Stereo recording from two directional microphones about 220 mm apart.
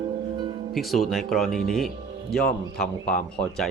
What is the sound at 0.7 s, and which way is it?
Speech, centre (ahead or behind).